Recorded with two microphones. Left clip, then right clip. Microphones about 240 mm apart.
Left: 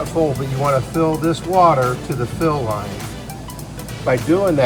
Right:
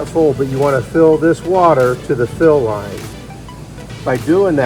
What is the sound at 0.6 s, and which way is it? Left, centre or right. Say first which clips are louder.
Speech: right 6 dB; right.